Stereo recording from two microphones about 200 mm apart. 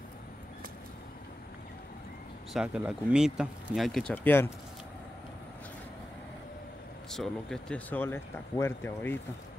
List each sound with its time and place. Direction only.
2.5 s speech: 5° right (ahead or behind)
4.1 s speech: 10° left (ahead or behind)
7.1 s speech: centre (ahead or behind)